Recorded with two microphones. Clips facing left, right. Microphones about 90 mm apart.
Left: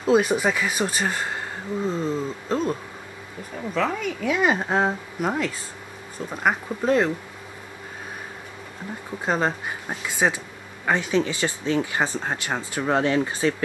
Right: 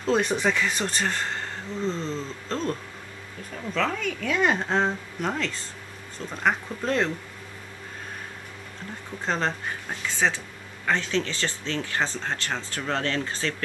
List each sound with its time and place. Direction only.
0.0 s speech: 5° left (ahead or behind)
9.2 s speech: 10° left (ahead or behind)